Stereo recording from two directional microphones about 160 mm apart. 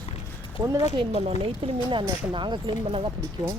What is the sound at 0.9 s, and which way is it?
Speech, 35° right (ahead or behind).